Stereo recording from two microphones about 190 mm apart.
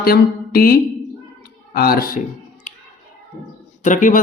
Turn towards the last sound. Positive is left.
turn(degrees=40)  # may be behind; listen again after turning